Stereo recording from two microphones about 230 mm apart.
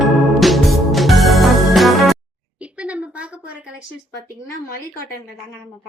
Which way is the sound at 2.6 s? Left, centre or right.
Centre.